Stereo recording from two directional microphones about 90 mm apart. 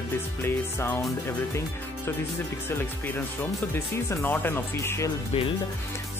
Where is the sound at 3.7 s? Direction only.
25° left (ahead or behind).